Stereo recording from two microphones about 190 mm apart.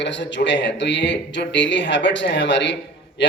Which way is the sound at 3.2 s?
65° left (ahead or behind).